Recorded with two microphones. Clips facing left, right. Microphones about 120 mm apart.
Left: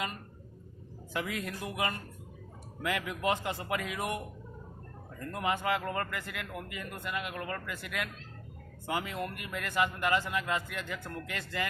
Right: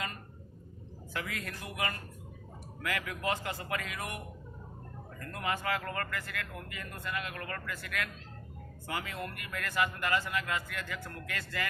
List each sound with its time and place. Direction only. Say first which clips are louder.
1.1 s a man's voice: left 4 dB; 20° left (ahead or behind)
5.3 s a man's voice: left 3 dB; 20° left (ahead or behind)